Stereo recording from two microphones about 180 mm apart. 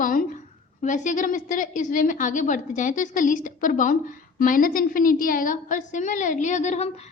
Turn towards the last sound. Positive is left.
turn(degrees=40)  # may be behind; listen again after turning